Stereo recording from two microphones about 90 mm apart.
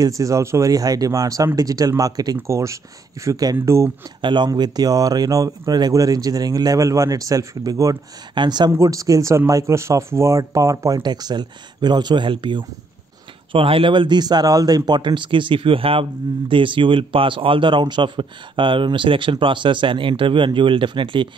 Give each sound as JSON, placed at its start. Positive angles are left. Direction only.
{"t": 0.0, "sound": "speech", "side_deg": -35}
{"t": 4.2, "sound": "speech", "side_deg": -60}
{"t": 4.5, "sound": "speech", "side_deg": -45}
{"t": 8.4, "sound": "speech", "side_deg": -50}
{"t": 8.7, "sound": "speech", "side_deg": -40}
{"t": 11.0, "sound": "speech", "side_deg": -50}
{"t": 13.5, "sound": "speech", "side_deg": -85}
{"t": 14.9, "sound": "speech", "side_deg": -60}